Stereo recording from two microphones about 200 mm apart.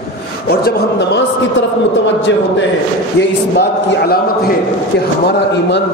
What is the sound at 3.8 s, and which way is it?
Speech, 50° left (ahead or behind).